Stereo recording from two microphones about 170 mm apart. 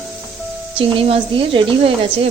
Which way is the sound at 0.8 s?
35° right (ahead or behind).